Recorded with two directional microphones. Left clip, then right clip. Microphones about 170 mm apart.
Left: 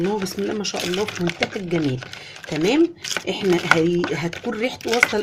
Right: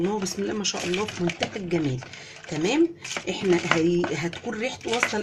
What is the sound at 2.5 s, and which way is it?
Speech, 35° left (ahead or behind).